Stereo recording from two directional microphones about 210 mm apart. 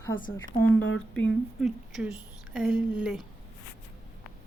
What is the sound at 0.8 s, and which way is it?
Speech, 55° left (ahead or behind).